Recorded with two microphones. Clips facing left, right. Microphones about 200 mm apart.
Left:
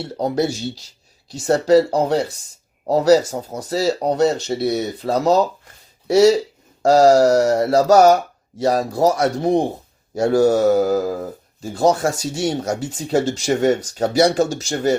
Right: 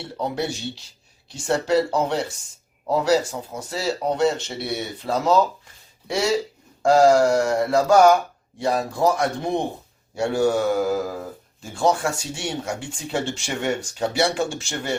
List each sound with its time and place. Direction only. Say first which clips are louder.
0.0 s speech: left 6 dB; 40° left (ahead or behind)